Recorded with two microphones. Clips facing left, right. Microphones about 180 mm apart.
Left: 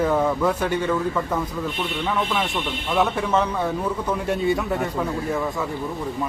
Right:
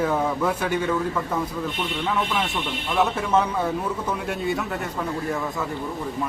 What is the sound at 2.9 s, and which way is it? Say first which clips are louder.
A man's voice: even; centre (ahead or behind).